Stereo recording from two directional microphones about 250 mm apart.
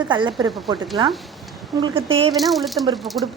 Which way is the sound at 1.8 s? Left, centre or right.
Centre.